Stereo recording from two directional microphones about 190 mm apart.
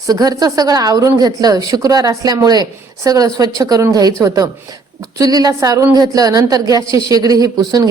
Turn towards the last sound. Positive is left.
turn(degrees=-20)  # may be behind; listen again after turning